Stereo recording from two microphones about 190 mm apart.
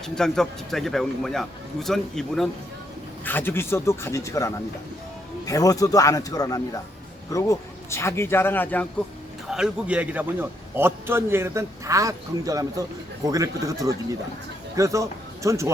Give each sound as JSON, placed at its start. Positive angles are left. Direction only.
{"t": 0.2, "sound": "a man's voice", "side_deg": 0}
{"t": 9.5, "sound": "a man's voice", "side_deg": -5}